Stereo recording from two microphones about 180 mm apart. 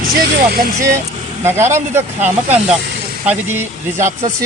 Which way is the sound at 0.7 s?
15° right (ahead or behind).